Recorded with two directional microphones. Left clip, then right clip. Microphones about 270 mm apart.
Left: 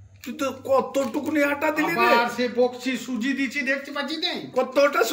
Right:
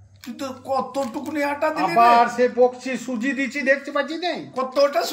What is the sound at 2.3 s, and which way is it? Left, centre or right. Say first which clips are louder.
Speech: right 5 dB; right.